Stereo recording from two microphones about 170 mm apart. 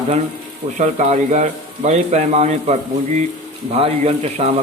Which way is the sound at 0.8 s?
45° right (ahead or behind).